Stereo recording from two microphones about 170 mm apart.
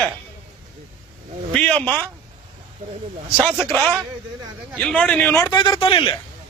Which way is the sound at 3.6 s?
10° left (ahead or behind).